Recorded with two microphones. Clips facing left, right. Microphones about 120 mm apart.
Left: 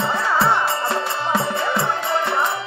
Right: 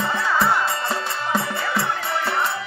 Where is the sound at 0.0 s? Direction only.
25° left (ahead or behind).